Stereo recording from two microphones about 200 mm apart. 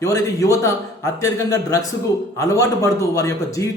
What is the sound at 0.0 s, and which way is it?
A man's voice, 15° left (ahead or behind).